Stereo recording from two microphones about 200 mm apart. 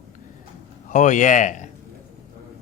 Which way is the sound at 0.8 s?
40° left (ahead or behind).